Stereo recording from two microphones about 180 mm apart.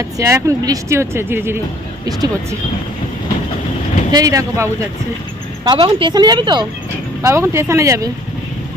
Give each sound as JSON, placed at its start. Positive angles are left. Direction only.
{"t": 0.0, "sound": "a woman's voice", "side_deg": -15}
{"t": 4.1, "sound": "speech", "side_deg": -20}
{"t": 5.6, "sound": "a woman's voice", "side_deg": -30}